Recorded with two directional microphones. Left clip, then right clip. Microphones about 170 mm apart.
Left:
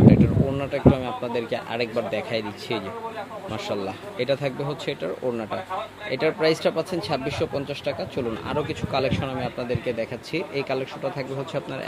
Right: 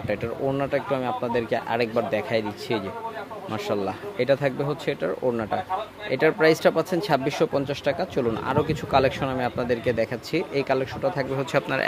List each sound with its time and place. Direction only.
0.1 s speech: 10° right (ahead or behind)